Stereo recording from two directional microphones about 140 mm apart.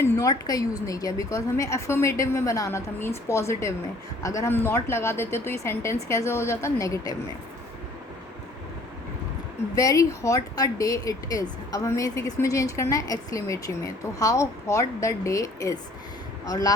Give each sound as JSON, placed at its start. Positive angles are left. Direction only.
{"t": 0.0, "sound": "a woman's voice", "side_deg": 20}
{"t": 9.7, "sound": "a woman's voice", "side_deg": 25}